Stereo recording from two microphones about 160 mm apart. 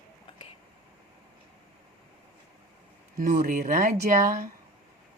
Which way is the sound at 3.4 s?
60° right (ahead or behind).